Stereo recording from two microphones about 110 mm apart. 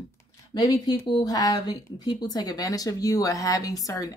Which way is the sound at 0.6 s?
35° left (ahead or behind).